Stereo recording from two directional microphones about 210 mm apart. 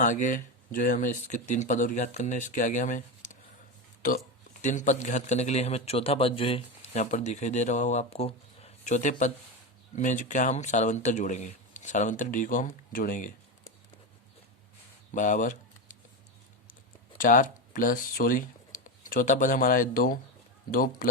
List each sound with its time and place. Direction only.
0.0 s speech: 35° left (ahead or behind)
4.6 s speech: 35° left (ahead or behind)
15.1 s a sound: 35° left (ahead or behind)
17.2 s speech: 40° left (ahead or behind)